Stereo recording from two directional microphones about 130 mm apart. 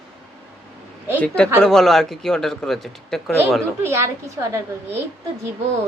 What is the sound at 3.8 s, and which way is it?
Speech, 20° right (ahead or behind).